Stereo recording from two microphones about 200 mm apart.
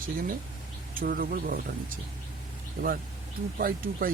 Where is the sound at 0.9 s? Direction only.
45° right (ahead or behind).